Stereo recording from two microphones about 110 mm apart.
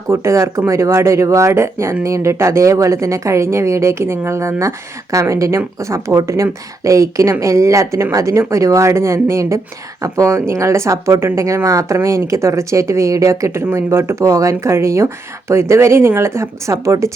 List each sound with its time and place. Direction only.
0.1 s a woman's voice: 25° right (ahead or behind)